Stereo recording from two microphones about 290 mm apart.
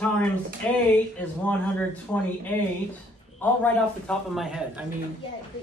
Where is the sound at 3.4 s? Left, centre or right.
Centre.